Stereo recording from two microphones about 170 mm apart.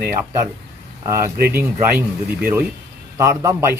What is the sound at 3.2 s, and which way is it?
Speech, 15° right (ahead or behind).